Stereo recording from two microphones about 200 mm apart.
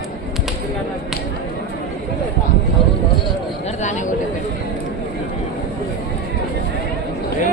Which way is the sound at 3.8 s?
35° left (ahead or behind).